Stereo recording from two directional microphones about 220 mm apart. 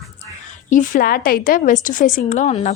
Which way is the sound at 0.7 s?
40° left (ahead or behind).